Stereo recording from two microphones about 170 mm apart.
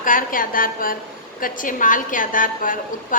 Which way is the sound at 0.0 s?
55° left (ahead or behind).